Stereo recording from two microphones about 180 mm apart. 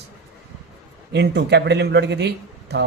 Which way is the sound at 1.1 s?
70° right (ahead or behind).